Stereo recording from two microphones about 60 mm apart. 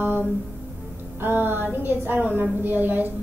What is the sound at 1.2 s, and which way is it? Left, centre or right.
A woman's voice, right.